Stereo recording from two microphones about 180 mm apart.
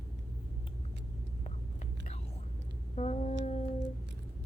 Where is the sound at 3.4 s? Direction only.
35° left (ahead or behind).